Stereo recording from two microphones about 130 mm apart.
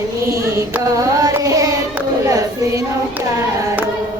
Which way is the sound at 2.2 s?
25° right (ahead or behind).